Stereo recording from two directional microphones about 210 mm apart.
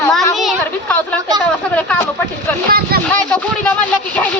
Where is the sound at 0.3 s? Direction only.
5° left (ahead or behind).